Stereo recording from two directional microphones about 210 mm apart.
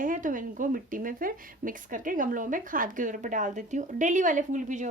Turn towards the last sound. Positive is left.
turn(degrees=-35)  # may be behind; listen again after turning